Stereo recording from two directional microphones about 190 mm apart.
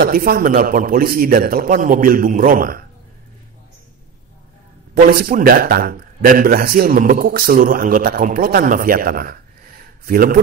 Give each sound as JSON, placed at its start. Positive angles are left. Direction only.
{"t": 0.0, "sound": "speech", "side_deg": -50}
{"t": 4.9, "sound": "a man's voice", "side_deg": -50}